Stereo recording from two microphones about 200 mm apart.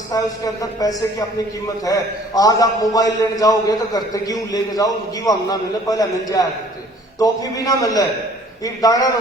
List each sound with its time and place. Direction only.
0.1 s a man's voice: 15° left (ahead or behind)